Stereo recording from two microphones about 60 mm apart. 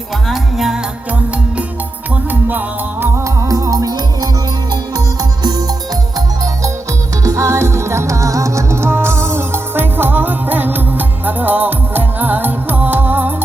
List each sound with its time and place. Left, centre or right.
0.3 s music: centre
2.3 s music: right
3.2 s music: right
6.1 s music: right
7.3 s music: right